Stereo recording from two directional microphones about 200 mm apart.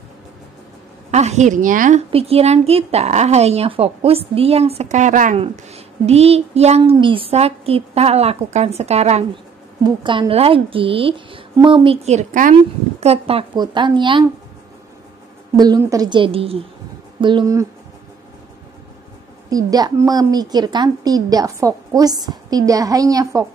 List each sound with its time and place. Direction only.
1.1 s a woman's voice: 35° right (ahead or behind)
15.5 s a woman's voice: 20° right (ahead or behind)
19.5 s a woman's voice: 20° right (ahead or behind)